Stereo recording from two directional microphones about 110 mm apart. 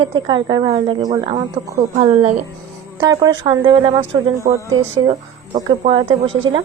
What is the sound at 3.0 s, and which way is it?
A woman's voice, 35° right (ahead or behind).